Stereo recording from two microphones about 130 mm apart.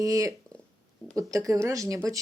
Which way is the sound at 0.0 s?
25° right (ahead or behind).